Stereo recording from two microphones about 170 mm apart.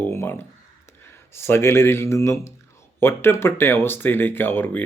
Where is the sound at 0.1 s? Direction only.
15° left (ahead or behind).